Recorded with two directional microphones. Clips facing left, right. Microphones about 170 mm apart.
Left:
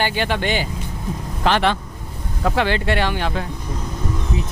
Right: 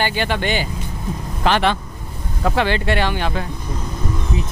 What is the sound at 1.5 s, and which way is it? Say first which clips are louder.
Speech: right 1 dB; 15° right (ahead or behind).